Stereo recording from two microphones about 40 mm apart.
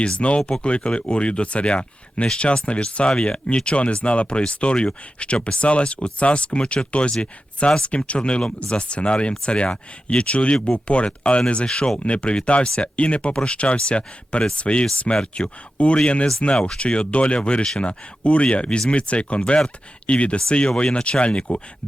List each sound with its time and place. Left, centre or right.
0.0 s speech: left
19.4 s speech: centre